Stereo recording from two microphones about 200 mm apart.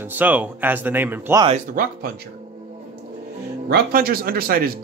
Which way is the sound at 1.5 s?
45° right (ahead or behind).